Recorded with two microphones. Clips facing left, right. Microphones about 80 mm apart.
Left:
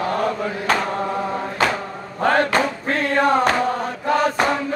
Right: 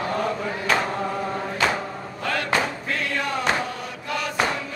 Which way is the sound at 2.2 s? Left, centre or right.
Left.